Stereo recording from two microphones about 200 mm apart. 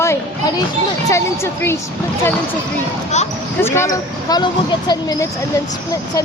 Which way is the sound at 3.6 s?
15° left (ahead or behind).